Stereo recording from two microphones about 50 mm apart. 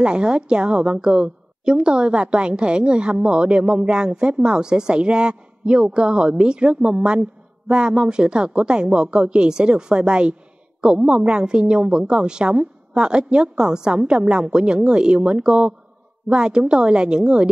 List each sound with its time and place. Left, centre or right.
0.0 s a woman's voice: centre